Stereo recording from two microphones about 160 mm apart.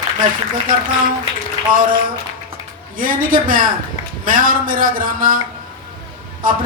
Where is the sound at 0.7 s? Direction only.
60° right (ahead or behind).